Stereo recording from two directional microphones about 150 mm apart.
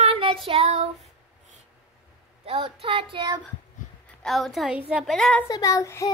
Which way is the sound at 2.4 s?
40° right (ahead or behind).